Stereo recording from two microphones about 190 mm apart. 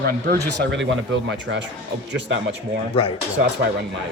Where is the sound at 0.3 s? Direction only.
60° right (ahead or behind).